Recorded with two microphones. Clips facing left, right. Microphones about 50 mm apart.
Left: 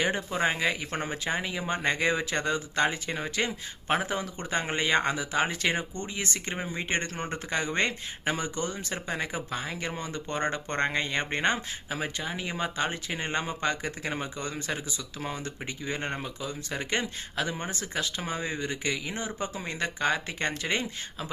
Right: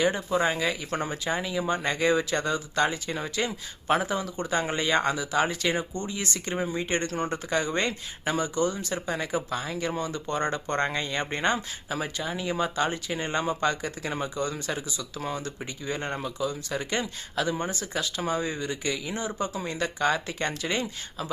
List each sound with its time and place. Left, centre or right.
0.0 s speech: left
6.8 s speech: left